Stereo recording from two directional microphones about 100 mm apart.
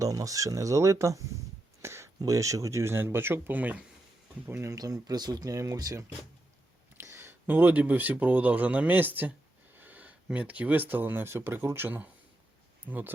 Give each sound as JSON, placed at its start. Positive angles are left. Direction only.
{"t": 0.0, "sound": "speech", "side_deg": -35}
{"t": 1.8, "sound": "a sound", "side_deg": -30}
{"t": 2.1, "sound": "speech", "side_deg": -35}
{"t": 4.7, "sound": "speech", "side_deg": -35}
{"t": 6.9, "sound": "speech", "side_deg": -25}